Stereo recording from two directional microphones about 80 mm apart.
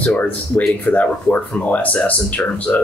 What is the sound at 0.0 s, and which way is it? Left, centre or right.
Speech, centre.